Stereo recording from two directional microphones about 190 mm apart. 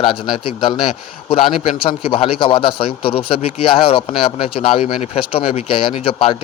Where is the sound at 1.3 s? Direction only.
30° left (ahead or behind).